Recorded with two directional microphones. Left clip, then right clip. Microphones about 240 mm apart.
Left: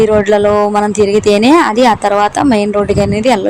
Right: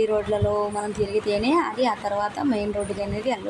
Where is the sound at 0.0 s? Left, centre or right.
Left.